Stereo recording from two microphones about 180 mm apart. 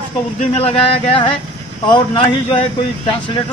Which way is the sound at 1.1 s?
30° left (ahead or behind).